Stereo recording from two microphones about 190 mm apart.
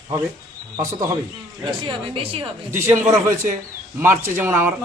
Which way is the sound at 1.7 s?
25° right (ahead or behind).